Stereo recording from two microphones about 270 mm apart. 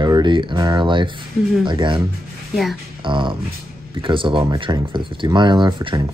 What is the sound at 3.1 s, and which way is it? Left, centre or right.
Speech, centre.